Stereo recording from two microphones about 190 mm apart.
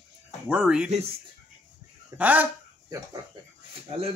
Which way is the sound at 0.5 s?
5° right (ahead or behind).